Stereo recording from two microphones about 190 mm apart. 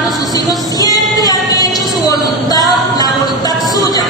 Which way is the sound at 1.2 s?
20° left (ahead or behind).